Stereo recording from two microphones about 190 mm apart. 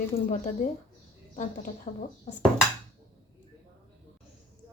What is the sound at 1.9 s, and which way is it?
Speech, 40° left (ahead or behind).